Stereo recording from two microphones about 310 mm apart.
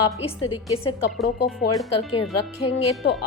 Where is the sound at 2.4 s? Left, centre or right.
Left.